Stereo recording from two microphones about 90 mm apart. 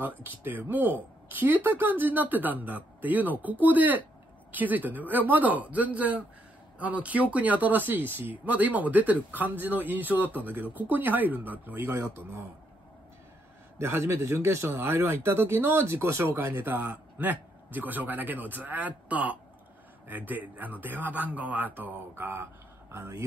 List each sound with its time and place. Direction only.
0.2 s speech: 20° right (ahead or behind)
13.7 s speech: 30° right (ahead or behind)